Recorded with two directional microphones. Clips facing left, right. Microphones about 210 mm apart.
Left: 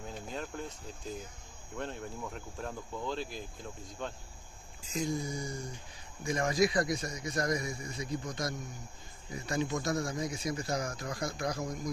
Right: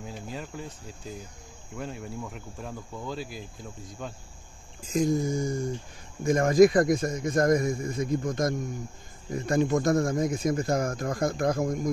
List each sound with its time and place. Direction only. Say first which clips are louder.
0.0 s speech: right 2 dB; 5° right (ahead or behind)
4.9 s speech: right 9 dB; 50° right (ahead or behind)